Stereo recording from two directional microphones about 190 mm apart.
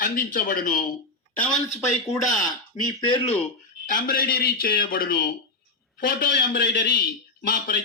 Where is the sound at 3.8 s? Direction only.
45° left (ahead or behind).